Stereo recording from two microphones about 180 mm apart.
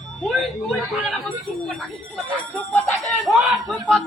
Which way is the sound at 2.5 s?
10° left (ahead or behind).